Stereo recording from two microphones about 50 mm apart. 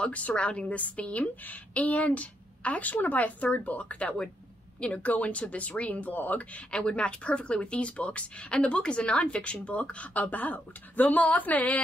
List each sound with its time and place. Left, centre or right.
0.0 s speech: left
6.7 s speech: left